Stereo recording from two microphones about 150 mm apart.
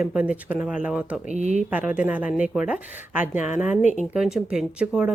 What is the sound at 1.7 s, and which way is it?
Speech, 10° right (ahead or behind).